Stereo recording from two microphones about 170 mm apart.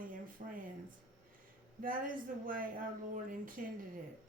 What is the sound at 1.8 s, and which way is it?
Speech, 55° right (ahead or behind).